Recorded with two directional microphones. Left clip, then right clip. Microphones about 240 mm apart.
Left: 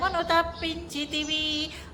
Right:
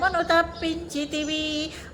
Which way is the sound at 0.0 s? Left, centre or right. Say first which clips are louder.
Right 3 dB; centre.